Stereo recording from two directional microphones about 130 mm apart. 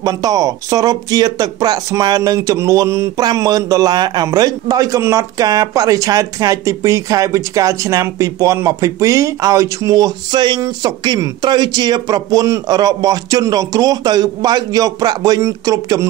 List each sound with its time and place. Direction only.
0.0 s speech: 30° right (ahead or behind)